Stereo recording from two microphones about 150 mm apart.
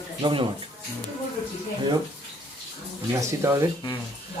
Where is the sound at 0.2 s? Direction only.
35° right (ahead or behind).